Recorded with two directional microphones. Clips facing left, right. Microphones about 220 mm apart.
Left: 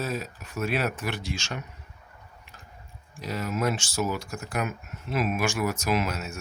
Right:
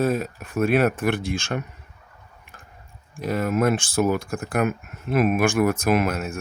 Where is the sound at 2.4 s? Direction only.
55° right (ahead or behind).